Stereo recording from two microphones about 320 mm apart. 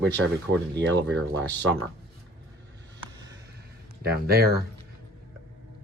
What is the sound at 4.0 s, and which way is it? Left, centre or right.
Speech, right.